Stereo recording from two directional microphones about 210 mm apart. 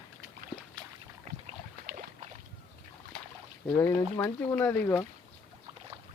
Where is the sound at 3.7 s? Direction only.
10° left (ahead or behind).